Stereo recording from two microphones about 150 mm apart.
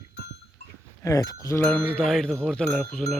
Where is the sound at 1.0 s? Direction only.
20° left (ahead or behind).